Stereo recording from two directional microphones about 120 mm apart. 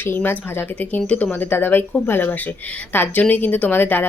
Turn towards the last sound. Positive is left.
turn(degrees=15)  # may be behind; listen again after turning